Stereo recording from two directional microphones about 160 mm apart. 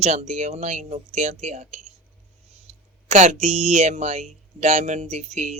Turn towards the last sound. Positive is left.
turn(degrees=-45)  # may be behind; listen again after turning